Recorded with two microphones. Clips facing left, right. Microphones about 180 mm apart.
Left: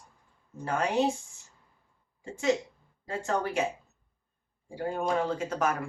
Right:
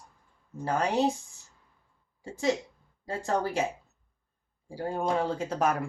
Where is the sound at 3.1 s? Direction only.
35° right (ahead or behind).